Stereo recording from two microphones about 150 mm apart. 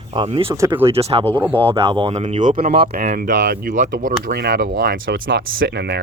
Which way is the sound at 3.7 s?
55° right (ahead or behind).